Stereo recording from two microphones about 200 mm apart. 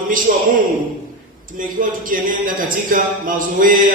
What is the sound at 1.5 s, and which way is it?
Speech, 45° right (ahead or behind).